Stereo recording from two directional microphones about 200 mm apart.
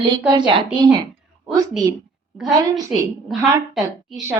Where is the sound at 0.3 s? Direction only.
25° right (ahead or behind).